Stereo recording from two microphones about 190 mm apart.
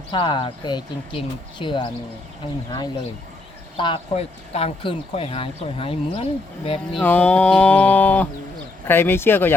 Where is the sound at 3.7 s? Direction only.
25° left (ahead or behind).